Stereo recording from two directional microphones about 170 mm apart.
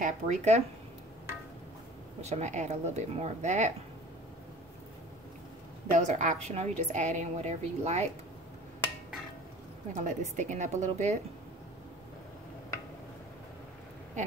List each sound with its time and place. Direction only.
0.0 s a woman's voice: 45° right (ahead or behind)
2.2 s a woman's voice: 40° right (ahead or behind)
5.9 s a woman's voice: 45° right (ahead or behind)
9.9 s a woman's voice: 45° right (ahead or behind)